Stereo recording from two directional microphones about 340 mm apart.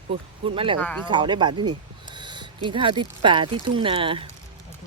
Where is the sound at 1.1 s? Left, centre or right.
Centre.